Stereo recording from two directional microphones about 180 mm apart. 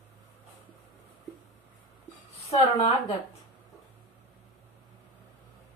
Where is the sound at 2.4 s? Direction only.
35° left (ahead or behind).